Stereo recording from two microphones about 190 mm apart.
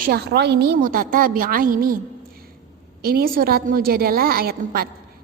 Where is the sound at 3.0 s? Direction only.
55° right (ahead or behind).